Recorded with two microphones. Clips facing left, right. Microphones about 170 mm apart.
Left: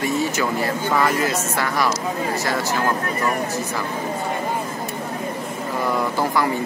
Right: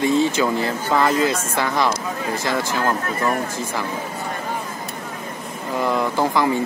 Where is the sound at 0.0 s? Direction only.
25° right (ahead or behind).